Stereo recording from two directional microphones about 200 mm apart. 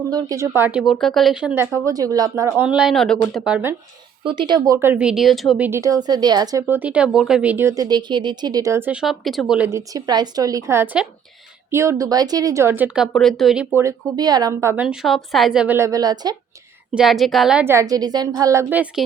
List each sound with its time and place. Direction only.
0.1 s speech: 20° right (ahead or behind)
2.6 s speech: 5° right (ahead or behind)
4.2 s speech: 25° right (ahead or behind)
16.9 s speech: centre (ahead or behind)